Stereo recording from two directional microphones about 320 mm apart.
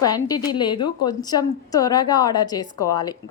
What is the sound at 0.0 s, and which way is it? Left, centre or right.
Speech, centre.